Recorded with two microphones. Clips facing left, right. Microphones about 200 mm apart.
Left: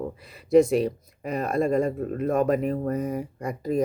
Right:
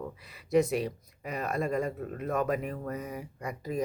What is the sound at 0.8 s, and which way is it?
Speech, 50° left (ahead or behind).